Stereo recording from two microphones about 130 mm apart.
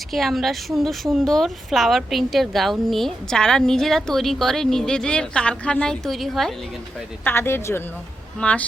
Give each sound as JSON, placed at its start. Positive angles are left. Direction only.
{"t": 0.1, "sound": "speech", "side_deg": 0}
{"t": 7.3, "sound": "speech", "side_deg": 20}